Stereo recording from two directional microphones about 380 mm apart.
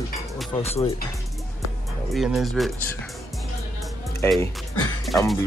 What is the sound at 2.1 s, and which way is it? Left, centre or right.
Speech, centre.